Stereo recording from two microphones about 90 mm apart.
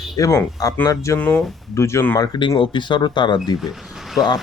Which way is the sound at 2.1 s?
45° left (ahead or behind).